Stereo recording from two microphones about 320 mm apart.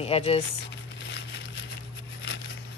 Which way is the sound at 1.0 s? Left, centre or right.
Left.